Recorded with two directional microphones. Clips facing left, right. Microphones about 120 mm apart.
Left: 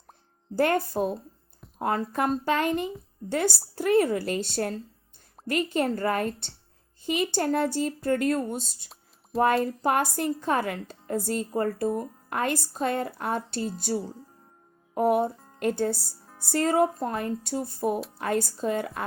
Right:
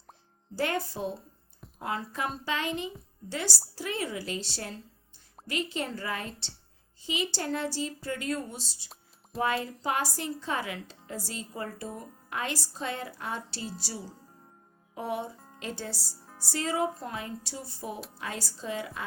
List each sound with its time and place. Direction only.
0.5 s a woman's voice: 50° left (ahead or behind)